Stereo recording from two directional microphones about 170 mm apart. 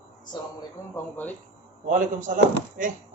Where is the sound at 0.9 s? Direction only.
10° left (ahead or behind).